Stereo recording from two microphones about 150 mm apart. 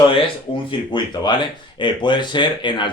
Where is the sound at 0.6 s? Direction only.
30° left (ahead or behind).